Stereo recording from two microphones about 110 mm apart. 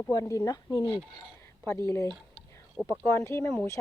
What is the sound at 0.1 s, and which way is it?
Speech, 30° left (ahead or behind).